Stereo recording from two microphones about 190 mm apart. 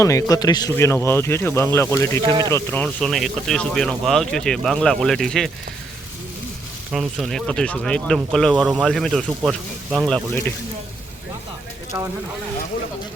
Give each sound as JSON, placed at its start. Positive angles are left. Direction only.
{"t": 0.0, "sound": "speech", "side_deg": 15}
{"t": 2.2, "sound": "speech", "side_deg": -25}
{"t": 2.5, "sound": "speech", "side_deg": 10}
{"t": 6.9, "sound": "speech", "side_deg": 0}